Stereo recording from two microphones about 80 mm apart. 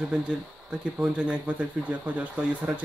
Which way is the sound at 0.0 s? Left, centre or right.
Centre.